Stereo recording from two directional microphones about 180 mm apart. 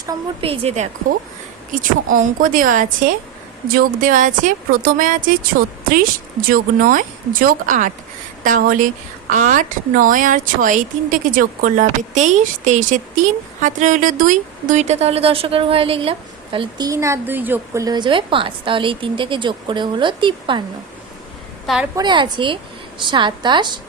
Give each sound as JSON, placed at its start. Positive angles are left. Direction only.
{"t": 0.4, "sound": "a woman's voice", "side_deg": -30}
{"t": 1.7, "sound": "a woman's voice", "side_deg": -50}
{"t": 21.9, "sound": "a woman's voice", "side_deg": -25}